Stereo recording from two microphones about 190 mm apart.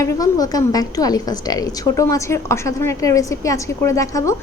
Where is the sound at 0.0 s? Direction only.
20° left (ahead or behind).